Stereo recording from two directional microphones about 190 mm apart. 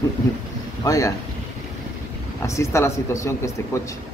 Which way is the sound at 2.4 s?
15° left (ahead or behind).